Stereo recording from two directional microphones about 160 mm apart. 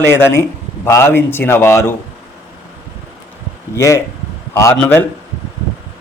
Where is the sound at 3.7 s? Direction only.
20° left (ahead or behind).